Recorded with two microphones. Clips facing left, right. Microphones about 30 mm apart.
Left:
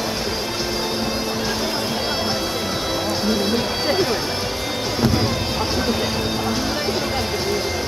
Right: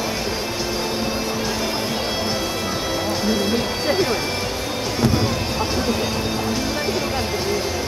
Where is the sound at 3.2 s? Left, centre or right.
Centre.